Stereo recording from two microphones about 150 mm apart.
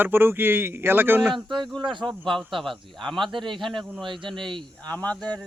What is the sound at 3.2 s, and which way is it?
Speech, 30° right (ahead or behind).